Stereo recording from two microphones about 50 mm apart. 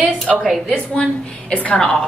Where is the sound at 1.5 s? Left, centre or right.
Left.